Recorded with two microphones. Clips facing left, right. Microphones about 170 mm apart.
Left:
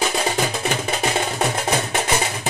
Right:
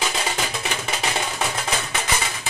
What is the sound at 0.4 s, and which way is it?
Music, 40° left (ahead or behind).